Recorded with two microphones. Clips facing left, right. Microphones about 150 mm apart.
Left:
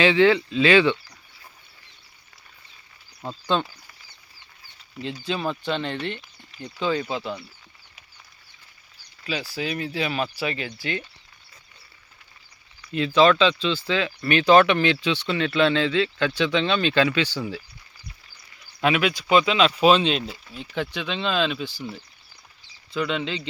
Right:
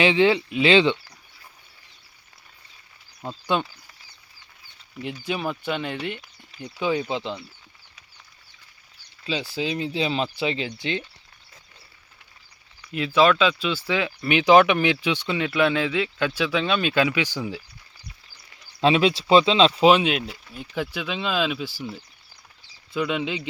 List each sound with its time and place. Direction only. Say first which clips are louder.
0.0 s speech: left 1 dB; 20° right (ahead or behind)
3.2 s speech: even; 5° right (ahead or behind)
5.2 s speech: even; 10° right (ahead or behind)
9.2 s speech: right 2 dB; 25° right (ahead or behind)
13.4 s speech: left 1 dB; 10° right (ahead or behind)
18.8 s speech: right 3 dB; 25° right (ahead or behind)
19.9 s speech: even; 10° right (ahead or behind)
23.0 s speech: right 1 dB; 10° right (ahead or behind)